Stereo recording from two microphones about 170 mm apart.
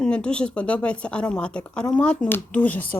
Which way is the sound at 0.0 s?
5° left (ahead or behind).